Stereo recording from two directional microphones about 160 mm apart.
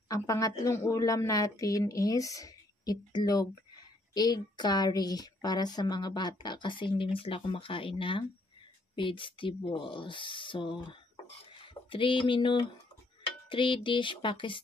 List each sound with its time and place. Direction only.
0.1 s a woman's voice: 20° left (ahead or behind)
11.5 s a sound: 30° left (ahead or behind)
13.5 s speech: 30° left (ahead or behind)